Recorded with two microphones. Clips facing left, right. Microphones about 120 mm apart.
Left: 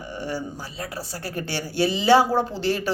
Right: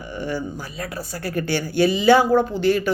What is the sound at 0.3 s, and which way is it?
Speech, 30° left (ahead or behind).